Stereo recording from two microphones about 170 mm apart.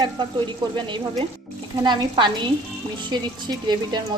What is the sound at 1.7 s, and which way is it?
Speech, 25° right (ahead or behind).